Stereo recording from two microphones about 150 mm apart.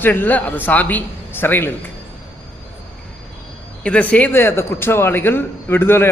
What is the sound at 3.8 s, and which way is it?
A man's voice, 10° left (ahead or behind).